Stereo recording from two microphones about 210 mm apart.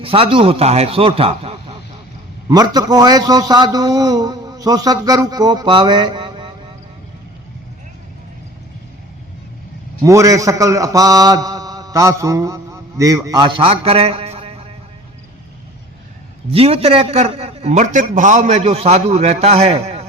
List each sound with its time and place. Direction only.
0.0 s a man's voice: 25° right (ahead or behind)
10.0 s a man's voice: 15° right (ahead or behind)
16.5 s a man's voice: 30° right (ahead or behind)